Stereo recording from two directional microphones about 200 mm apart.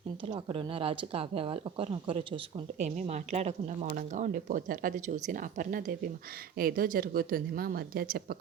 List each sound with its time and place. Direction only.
0.3 s speech: 25° right (ahead or behind); by 8.4 s 45° right (ahead or behind)